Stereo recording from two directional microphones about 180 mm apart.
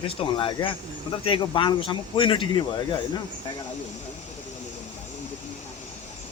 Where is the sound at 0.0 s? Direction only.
30° left (ahead or behind).